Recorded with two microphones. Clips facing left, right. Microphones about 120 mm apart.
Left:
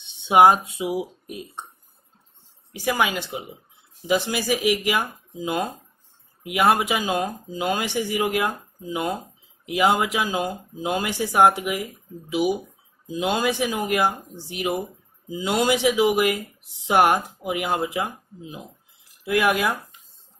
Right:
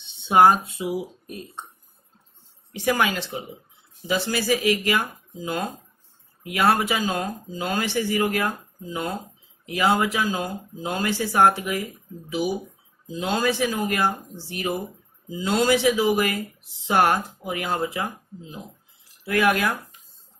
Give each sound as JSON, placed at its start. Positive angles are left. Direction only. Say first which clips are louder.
{"t": 0.0, "sound": "speech", "louder": "left 1 dB", "side_deg": 15}
{"t": 2.7, "sound": "speech", "louder": "right 1 dB", "side_deg": 5}